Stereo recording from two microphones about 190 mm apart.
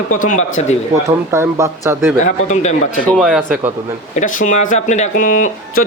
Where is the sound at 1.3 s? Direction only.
15° right (ahead or behind).